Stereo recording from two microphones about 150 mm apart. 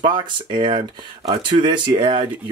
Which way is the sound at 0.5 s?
30° right (ahead or behind).